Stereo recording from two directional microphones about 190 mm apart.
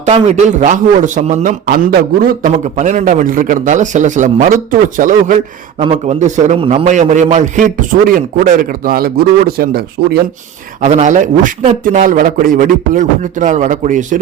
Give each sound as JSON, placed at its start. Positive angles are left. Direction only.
{"t": 0.0, "sound": "a man's voice", "side_deg": -35}
{"t": 10.8, "sound": "a man's voice", "side_deg": -35}